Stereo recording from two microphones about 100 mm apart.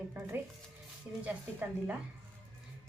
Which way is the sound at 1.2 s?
15° right (ahead or behind).